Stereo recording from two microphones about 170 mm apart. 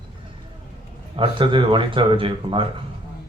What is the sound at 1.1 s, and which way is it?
A man's voice, 30° right (ahead or behind).